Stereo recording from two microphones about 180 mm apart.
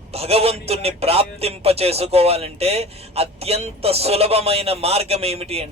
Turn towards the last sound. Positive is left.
turn(degrees=-35)  # may be behind; listen again after turning